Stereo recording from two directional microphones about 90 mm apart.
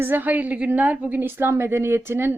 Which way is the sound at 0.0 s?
20° right (ahead or behind).